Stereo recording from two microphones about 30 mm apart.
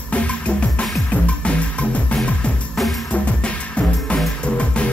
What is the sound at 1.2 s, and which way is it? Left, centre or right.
Music, left.